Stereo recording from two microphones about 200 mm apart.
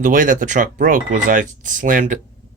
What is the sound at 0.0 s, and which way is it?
Speech, 40° right (ahead or behind).